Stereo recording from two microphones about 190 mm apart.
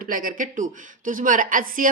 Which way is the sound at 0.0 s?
45° right (ahead or behind).